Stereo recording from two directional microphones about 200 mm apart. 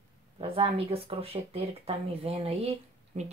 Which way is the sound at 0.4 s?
30° right (ahead or behind).